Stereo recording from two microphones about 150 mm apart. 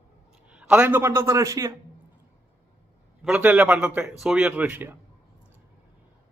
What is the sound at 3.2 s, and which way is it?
A man's voice, 5° right (ahead or behind).